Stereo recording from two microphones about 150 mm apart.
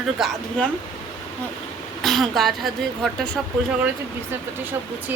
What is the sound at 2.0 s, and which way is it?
Speech, centre (ahead or behind).